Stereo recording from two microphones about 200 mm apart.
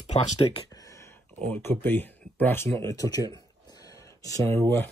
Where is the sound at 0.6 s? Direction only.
15° left (ahead or behind).